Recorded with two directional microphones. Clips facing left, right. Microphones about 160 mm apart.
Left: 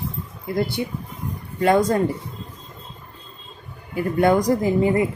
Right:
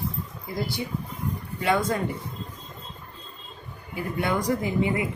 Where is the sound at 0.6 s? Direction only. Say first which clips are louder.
Left 7 dB; 55° left (ahead or behind).